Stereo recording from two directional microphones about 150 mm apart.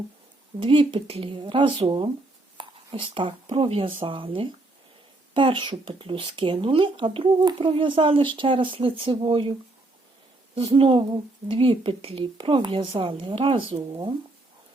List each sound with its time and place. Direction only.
0.6 s speech: 35° right (ahead or behind)